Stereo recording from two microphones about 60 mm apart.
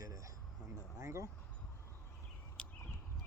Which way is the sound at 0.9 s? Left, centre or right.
Right.